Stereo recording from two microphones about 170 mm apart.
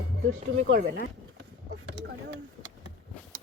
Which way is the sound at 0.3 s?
50° right (ahead or behind).